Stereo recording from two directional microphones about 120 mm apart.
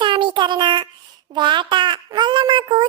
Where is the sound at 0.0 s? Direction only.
40° right (ahead or behind).